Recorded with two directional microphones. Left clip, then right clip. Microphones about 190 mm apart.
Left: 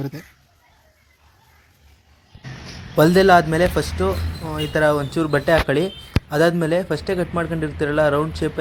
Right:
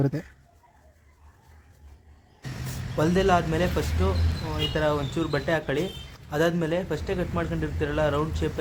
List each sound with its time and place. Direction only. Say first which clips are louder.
0.0 s speech: right 3 dB; 30° right (ahead or behind)
2.9 s speech: left 10 dB; 30° left (ahead or behind)